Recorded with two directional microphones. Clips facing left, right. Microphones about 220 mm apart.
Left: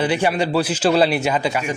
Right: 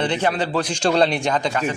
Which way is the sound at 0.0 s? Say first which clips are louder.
Left 2 dB; 10° left (ahead or behind).